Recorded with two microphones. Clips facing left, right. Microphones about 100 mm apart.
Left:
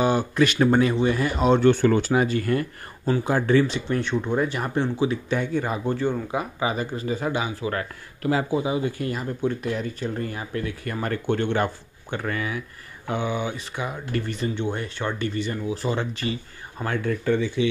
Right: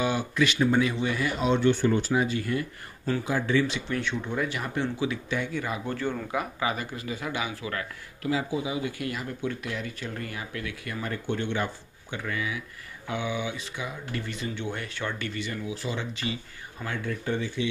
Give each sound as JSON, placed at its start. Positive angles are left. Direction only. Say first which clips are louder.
{"t": 0.0, "sound": "speech", "louder": "left 5 dB", "side_deg": 40}
{"t": 1.9, "sound": "speech", "louder": "left 4 dB", "side_deg": 75}
{"t": 2.2, "sound": "speech", "louder": "left 5 dB", "side_deg": 50}
{"t": 5.9, "sound": "speech", "louder": "left 6 dB", "side_deg": 20}
{"t": 8.2, "sound": "speech", "louder": "left 5 dB", "side_deg": 50}
{"t": 11.0, "sound": "speech", "louder": "left 6 dB", "side_deg": 60}
{"t": 14.6, "sound": "speech", "louder": "left 5 dB", "side_deg": 30}